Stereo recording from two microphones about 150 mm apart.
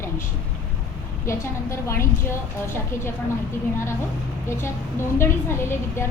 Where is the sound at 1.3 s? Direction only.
20° left (ahead or behind).